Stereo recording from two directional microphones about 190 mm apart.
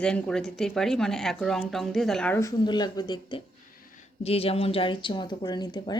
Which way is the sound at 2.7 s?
20° left (ahead or behind).